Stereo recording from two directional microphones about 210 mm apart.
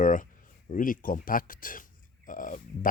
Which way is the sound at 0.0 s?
40° left (ahead or behind).